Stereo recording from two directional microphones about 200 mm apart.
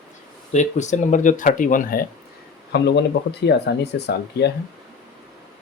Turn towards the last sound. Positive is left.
turn(degrees=55)  # may be behind; listen again after turning